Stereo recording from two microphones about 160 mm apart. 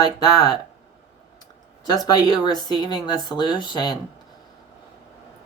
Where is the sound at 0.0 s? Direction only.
25° left (ahead or behind).